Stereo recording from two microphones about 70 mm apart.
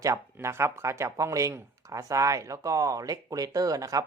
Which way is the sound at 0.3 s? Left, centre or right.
Right.